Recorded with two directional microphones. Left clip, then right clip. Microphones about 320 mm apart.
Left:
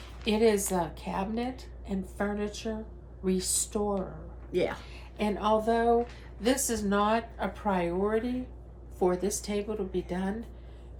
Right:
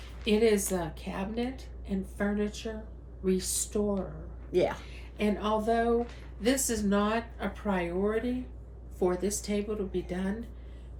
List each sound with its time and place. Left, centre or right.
0.3 s a woman's voice: centre
4.5 s speech: centre
4.8 s a woman's voice: centre